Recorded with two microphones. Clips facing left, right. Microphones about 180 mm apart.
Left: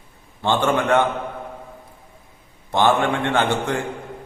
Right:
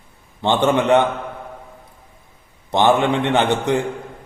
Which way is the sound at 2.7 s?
20° right (ahead or behind).